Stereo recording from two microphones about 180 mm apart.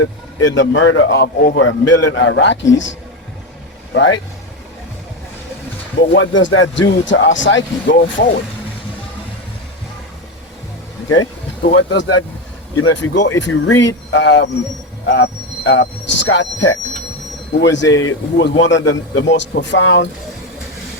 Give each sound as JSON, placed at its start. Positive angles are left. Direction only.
{"t": 0.0, "sound": "speech", "side_deg": 90}
{"t": 3.9, "sound": "speech", "side_deg": 90}
{"t": 6.0, "sound": "speech", "side_deg": 90}
{"t": 11.6, "sound": "speech", "side_deg": 80}